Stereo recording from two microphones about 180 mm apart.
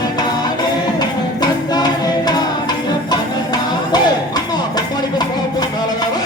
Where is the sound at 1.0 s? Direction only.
20° left (ahead or behind).